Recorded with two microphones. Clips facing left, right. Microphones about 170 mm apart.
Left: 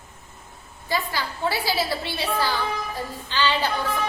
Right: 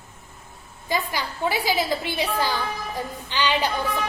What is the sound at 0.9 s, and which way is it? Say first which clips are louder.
A woman's voice: right 1 dB; 15° right (ahead or behind).